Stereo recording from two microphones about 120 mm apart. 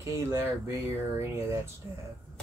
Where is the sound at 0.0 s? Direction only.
25° right (ahead or behind).